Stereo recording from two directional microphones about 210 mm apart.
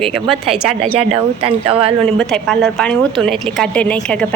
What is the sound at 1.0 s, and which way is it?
Speech, 25° right (ahead or behind).